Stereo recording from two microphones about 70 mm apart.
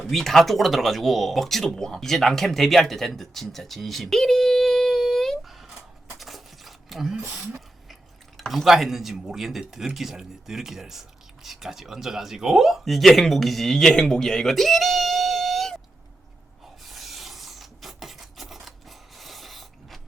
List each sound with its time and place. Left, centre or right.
0.1 s speech: centre
3.2 s a sound: centre
8.4 s speech: centre
16.8 s rub: centre